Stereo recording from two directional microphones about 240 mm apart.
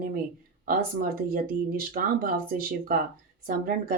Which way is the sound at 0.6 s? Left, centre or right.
Right.